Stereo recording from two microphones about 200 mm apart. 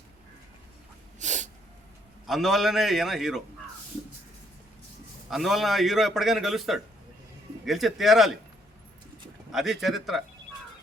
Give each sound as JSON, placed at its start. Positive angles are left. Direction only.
{"t": 1.2, "sound": "sneeze", "side_deg": -35}
{"t": 2.2, "sound": "a man's voice", "side_deg": 0}
{"t": 5.3, "sound": "a man's voice", "side_deg": 0}
{"t": 9.5, "sound": "a man's voice", "side_deg": 0}